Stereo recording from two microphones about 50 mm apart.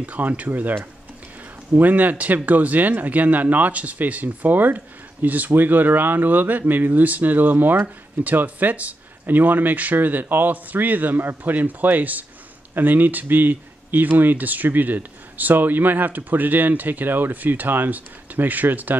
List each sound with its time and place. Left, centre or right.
0.0 s speech: right